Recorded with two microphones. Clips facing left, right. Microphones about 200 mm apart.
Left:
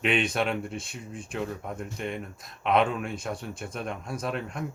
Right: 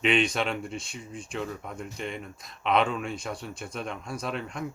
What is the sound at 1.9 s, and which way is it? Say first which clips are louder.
Speech: left 2 dB; 55° left (ahead or behind).